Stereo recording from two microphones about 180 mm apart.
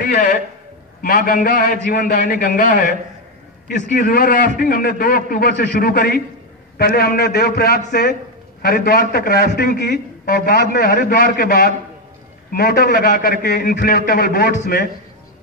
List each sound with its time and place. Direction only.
0.0 s a sound: 50° left (ahead or behind)
1.0 s a man's voice: 50° left (ahead or behind)
3.9 s a man's voice: 50° left (ahead or behind)
5.7 s a man's voice: 50° left (ahead or behind)